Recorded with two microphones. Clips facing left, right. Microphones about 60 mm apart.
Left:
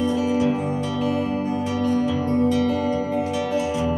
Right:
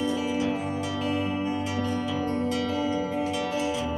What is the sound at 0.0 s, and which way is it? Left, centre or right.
Music, left.